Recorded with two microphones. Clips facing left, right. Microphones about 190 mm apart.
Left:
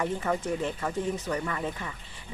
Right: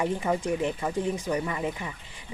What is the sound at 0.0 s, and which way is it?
Speech, 15° right (ahead or behind).